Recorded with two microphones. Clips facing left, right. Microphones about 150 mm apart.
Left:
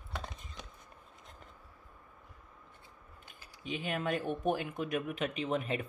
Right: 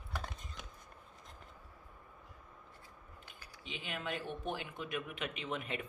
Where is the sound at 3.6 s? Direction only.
45° left (ahead or behind).